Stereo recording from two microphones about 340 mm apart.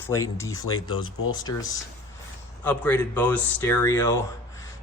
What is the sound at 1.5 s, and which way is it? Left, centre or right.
Speech, centre.